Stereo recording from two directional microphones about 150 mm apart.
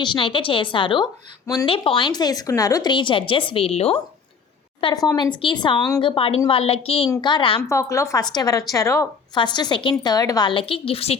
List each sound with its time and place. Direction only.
0.0 s a woman's voice: 35° left (ahead or behind)
7.1 s speech: 30° left (ahead or behind)
7.7 s speech: 20° left (ahead or behind); by 11.2 s 40° left (ahead or behind)